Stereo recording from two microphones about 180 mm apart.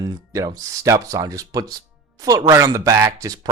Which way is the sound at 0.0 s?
20° right (ahead or behind).